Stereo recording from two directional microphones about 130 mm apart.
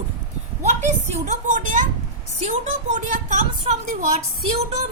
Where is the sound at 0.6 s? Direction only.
60° right (ahead or behind).